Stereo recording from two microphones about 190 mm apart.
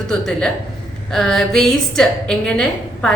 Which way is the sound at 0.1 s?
5° left (ahead or behind).